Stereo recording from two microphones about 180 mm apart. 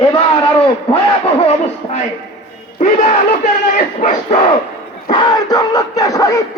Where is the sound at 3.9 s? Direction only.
35° left (ahead or behind).